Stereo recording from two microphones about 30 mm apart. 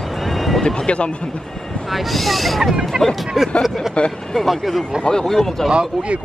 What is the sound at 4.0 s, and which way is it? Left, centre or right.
Speech, left.